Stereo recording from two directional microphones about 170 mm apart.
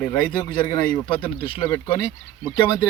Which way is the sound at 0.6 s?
25° left (ahead or behind).